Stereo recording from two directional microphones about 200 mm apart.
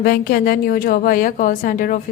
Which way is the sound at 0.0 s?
50° left (ahead or behind).